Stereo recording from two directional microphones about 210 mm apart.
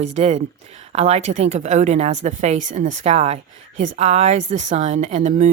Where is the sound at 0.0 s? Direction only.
30° right (ahead or behind).